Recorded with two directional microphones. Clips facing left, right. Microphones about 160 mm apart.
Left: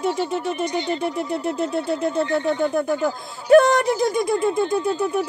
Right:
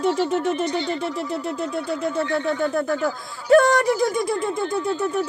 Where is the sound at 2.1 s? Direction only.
20° left (ahead or behind).